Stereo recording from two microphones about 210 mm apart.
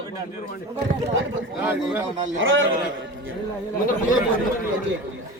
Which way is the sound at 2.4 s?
65° right (ahead or behind).